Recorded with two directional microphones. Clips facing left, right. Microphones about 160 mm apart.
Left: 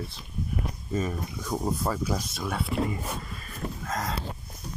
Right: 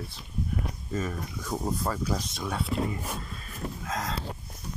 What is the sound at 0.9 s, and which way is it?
Speech, 15° left (ahead or behind).